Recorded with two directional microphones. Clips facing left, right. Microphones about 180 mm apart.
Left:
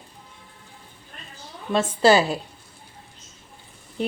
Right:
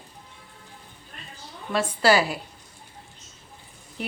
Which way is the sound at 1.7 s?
25° left (ahead or behind).